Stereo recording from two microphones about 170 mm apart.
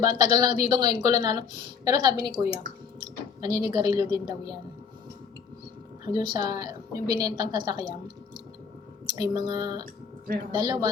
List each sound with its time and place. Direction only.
0.0 s a woman's voice: 25° right (ahead or behind)
6.1 s a woman's voice: 25° right (ahead or behind)